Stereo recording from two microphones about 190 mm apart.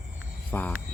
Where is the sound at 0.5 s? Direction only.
10° left (ahead or behind).